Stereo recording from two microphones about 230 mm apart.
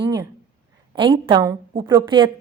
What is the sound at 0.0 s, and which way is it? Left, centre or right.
A woman's voice, centre.